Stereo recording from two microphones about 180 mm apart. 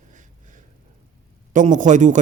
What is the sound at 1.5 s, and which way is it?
Speech, 45° right (ahead or behind).